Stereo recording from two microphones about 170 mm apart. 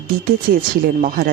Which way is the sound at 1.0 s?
55° right (ahead or behind).